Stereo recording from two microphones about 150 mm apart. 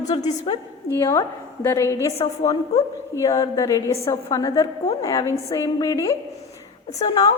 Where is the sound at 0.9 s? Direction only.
20° left (ahead or behind).